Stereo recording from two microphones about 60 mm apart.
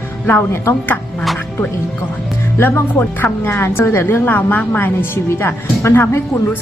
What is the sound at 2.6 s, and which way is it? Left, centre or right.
A woman's voice, left.